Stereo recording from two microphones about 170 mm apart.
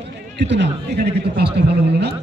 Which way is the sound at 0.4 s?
85° right.